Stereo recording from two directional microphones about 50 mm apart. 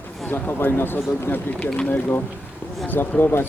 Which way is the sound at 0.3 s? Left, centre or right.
Left.